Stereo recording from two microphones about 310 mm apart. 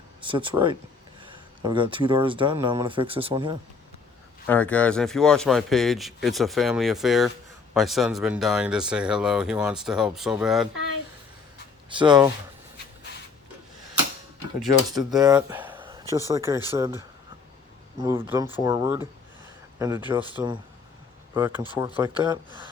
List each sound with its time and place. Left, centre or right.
0.2 s speech: centre
4.4 s speech: centre
11.9 s speech: centre
14.9 s speech: centre
20.3 s speech: centre